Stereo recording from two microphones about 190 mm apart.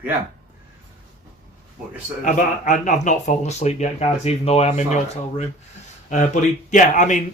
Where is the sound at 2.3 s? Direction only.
40° left (ahead or behind).